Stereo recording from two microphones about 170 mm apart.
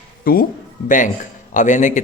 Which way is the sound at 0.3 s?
60° left (ahead or behind).